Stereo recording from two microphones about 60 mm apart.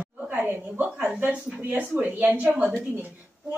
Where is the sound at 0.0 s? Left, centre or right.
Right.